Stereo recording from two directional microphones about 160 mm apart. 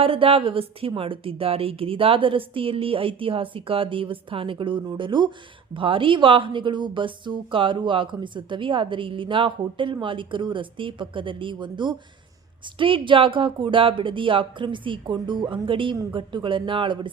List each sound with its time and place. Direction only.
0.0 s a woman's voice: 35° right (ahead or behind)